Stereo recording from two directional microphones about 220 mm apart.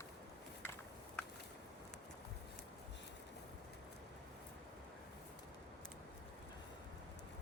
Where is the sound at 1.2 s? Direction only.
5° left (ahead or behind).